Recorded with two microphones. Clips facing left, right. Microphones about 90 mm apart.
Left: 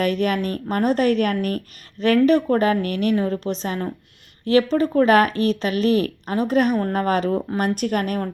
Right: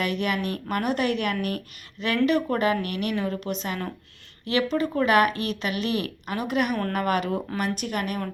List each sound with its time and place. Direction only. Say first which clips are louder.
0.0 s speech: left 5 dB; 40° left (ahead or behind)
7.5 s speech: left 6 dB; 45° left (ahead or behind)